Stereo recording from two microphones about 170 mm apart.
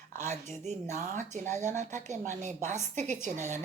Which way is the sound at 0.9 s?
45° right (ahead or behind).